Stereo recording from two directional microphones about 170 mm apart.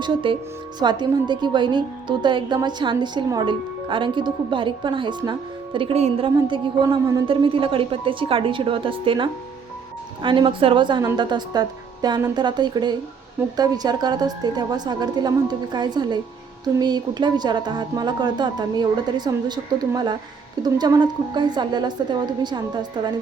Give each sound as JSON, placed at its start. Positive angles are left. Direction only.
{"t": 0.0, "sound": "a woman's voice", "side_deg": -30}